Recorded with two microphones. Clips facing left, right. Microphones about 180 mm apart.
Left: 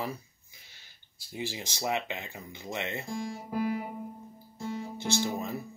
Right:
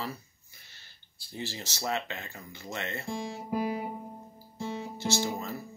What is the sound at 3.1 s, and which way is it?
Speech, 25° right (ahead or behind).